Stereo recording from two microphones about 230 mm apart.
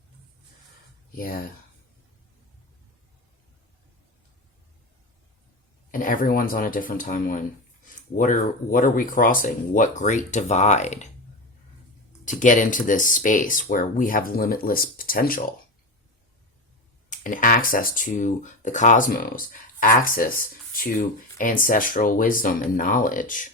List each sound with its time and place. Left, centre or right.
1.1 s speech: left
5.9 s speech: left
12.2 s speech: left
17.1 s speech: left